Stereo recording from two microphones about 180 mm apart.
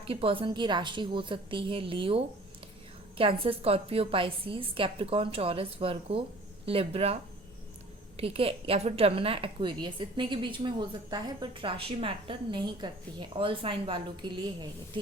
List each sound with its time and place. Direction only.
0.0 s a woman's voice: 30° right (ahead or behind)